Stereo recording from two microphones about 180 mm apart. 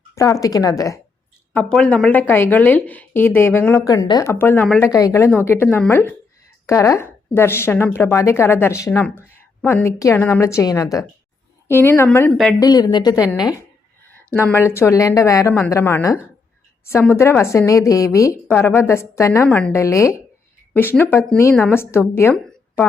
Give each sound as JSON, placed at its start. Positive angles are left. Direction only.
{"t": 0.1, "sound": "a woman's voice", "side_deg": 15}
{"t": 1.5, "sound": "a woman's voice", "side_deg": 5}
{"t": 4.9, "sound": "a woman's voice", "side_deg": 20}
{"t": 12.5, "sound": "a woman's voice", "side_deg": 20}
{"t": 14.5, "sound": "a woman's voice", "side_deg": 15}
{"t": 22.4, "sound": "a sound", "side_deg": 10}